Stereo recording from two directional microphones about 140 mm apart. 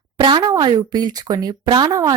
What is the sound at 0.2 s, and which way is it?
A woman's voice, 30° right (ahead or behind).